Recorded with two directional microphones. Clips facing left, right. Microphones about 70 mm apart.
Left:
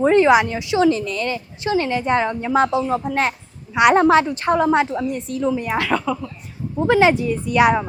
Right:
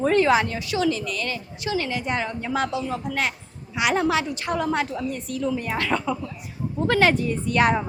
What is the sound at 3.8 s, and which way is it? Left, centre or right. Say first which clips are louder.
Speech: left 9 dB; left.